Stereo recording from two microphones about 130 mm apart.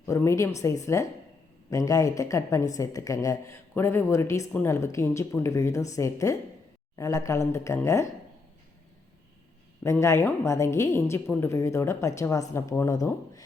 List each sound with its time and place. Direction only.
0.0 s a woman's voice: 20° left (ahead or behind)
9.8 s a woman's voice: 20° left (ahead or behind)